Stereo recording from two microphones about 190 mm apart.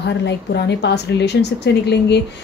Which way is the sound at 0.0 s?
65° left (ahead or behind).